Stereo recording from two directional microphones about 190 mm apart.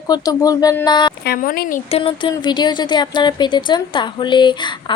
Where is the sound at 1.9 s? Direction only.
30° left (ahead or behind).